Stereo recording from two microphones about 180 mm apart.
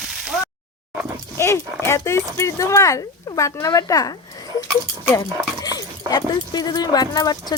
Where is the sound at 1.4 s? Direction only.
15° left (ahead or behind).